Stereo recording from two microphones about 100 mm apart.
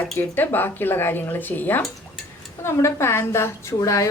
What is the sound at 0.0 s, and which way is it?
A woman's voice, 20° left (ahead or behind).